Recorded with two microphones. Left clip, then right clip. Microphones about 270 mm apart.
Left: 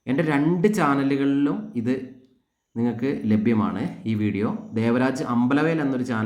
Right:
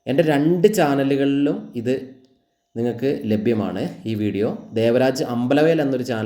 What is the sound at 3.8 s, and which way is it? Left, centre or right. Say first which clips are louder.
Speech: right 4 dB; left.